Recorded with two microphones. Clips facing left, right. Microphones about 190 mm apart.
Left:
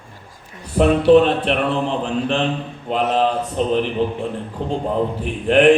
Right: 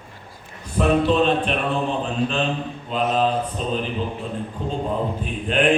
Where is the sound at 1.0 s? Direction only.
70° left (ahead or behind).